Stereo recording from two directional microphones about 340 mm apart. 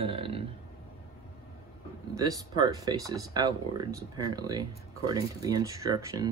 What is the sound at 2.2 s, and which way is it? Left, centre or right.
Speech, centre.